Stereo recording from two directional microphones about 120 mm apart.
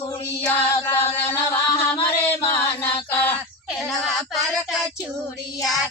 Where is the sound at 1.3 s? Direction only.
15° left (ahead or behind).